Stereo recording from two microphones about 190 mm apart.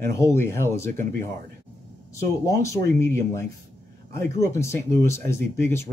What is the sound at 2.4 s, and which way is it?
Speech, 15° left (ahead or behind).